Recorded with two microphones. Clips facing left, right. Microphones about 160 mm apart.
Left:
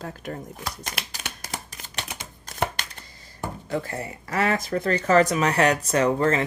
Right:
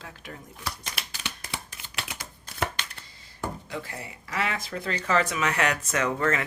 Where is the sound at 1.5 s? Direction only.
40° left (ahead or behind).